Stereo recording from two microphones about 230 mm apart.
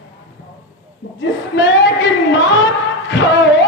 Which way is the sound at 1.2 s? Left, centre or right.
Left.